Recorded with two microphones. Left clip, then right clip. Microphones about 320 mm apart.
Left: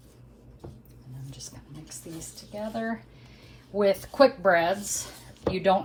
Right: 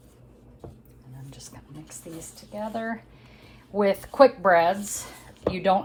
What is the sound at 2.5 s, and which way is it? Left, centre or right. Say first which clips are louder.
Speech: right 1 dB; right.